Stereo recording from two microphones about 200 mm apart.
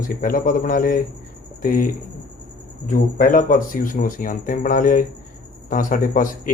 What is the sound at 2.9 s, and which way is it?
A man's voice, 40° left (ahead or behind).